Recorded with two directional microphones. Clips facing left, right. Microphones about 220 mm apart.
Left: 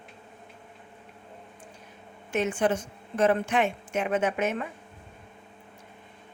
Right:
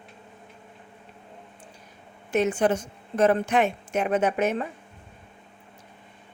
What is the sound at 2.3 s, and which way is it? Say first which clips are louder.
A woman's voice: right 3 dB; 40° right (ahead or behind).